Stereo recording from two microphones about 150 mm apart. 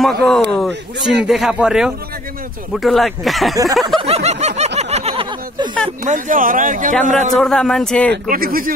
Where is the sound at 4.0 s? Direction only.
45° right (ahead or behind).